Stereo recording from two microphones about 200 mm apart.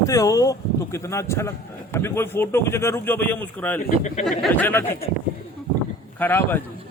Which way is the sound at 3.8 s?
35° left (ahead or behind).